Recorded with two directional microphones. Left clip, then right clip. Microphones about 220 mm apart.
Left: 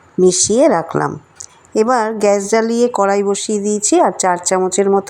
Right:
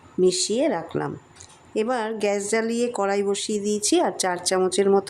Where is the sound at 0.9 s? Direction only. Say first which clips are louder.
Left 10 dB; 5° left (ahead or behind).